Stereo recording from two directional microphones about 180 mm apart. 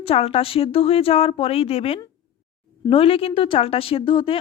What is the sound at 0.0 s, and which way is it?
A woman's voice, 30° left (ahead or behind).